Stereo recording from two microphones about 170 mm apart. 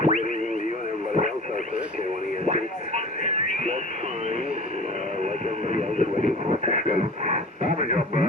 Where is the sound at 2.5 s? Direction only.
40° right (ahead or behind).